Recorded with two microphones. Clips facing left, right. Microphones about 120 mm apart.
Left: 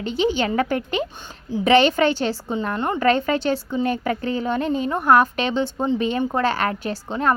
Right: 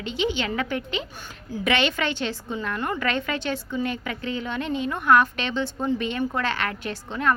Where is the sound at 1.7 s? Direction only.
35° left (ahead or behind).